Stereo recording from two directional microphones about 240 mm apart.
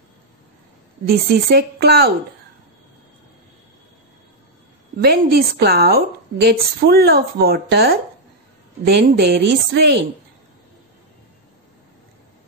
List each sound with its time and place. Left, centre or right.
1.0 s a woman's voice: right
4.9 s a woman's voice: right